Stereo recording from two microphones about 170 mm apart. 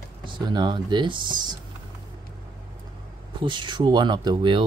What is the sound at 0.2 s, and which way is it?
Speech, 25° right (ahead or behind).